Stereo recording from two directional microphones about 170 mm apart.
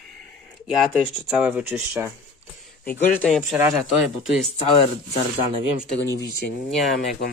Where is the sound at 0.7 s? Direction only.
Centre (ahead or behind).